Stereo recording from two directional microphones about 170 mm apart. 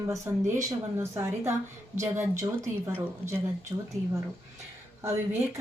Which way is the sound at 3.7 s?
25° right (ahead or behind).